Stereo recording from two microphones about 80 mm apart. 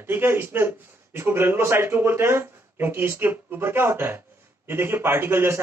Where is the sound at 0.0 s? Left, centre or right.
Right.